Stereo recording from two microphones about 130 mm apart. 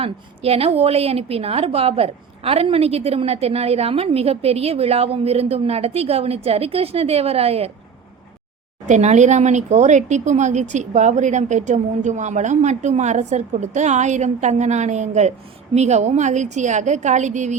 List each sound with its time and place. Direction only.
0.0 s a woman's voice: 50° right (ahead or behind)
8.9 s speech: 60° right (ahead or behind)